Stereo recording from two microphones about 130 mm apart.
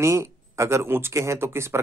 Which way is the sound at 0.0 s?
20° right (ahead or behind).